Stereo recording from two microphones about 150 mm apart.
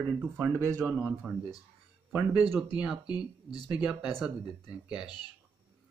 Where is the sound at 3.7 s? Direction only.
5° right (ahead or behind).